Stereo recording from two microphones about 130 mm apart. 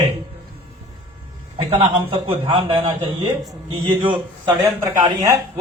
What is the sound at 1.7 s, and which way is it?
A man's voice, 45° right (ahead or behind).